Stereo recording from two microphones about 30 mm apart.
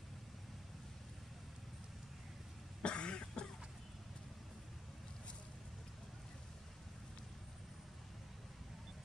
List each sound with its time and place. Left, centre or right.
2.8 s cough: left